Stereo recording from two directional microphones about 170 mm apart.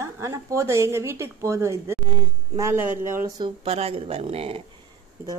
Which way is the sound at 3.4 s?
35° right (ahead or behind).